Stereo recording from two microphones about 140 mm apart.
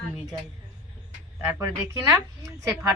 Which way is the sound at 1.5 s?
20° right (ahead or behind).